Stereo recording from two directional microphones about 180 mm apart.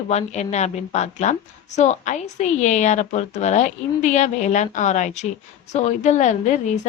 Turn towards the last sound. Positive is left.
turn(degrees=40)  # may be behind; listen again after turning